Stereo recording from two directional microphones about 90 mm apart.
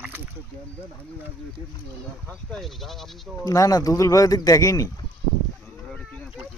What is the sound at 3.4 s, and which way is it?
Speech, 40° left (ahead or behind).